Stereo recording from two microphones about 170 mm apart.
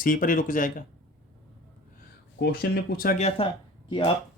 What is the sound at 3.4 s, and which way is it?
Speech, 35° left (ahead or behind).